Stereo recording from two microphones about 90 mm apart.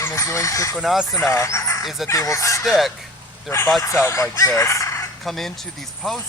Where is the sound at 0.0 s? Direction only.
35° left (ahead or behind).